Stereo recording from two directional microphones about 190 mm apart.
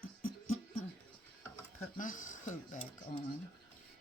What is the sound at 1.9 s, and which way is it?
Speech, 45° left (ahead or behind).